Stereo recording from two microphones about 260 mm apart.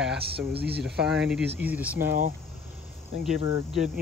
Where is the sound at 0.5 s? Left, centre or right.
Right.